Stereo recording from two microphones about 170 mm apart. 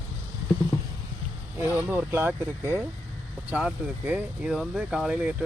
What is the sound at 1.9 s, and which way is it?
Speech, 15° right (ahead or behind).